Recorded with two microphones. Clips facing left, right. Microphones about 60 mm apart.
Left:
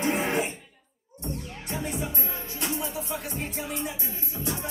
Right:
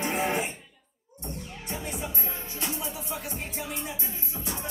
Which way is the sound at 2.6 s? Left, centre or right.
Left.